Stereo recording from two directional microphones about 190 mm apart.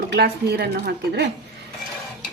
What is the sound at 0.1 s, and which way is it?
A woman's voice, 55° right (ahead or behind).